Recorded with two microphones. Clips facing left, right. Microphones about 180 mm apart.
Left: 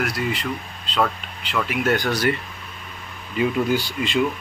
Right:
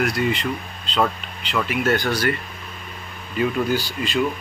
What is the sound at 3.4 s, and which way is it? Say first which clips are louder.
Speech: left 1 dB; 25° left (ahead or behind).